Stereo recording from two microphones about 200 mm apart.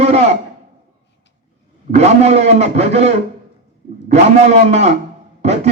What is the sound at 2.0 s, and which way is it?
A man's voice, 30° right (ahead or behind).